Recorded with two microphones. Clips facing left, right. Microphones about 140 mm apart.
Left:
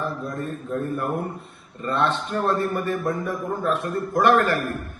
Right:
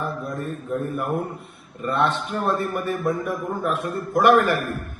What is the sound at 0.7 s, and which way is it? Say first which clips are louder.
A man's voice: right 1 dB; 5° right (ahead or behind).